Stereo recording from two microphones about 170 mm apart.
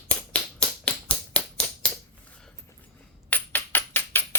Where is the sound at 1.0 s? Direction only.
5° left (ahead or behind).